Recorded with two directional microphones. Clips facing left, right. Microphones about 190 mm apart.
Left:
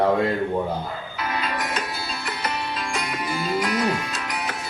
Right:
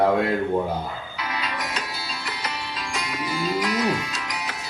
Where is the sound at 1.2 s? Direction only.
50° left (ahead or behind).